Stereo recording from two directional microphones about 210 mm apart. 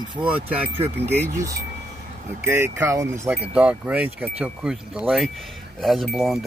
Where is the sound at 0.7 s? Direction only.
30° right (ahead or behind).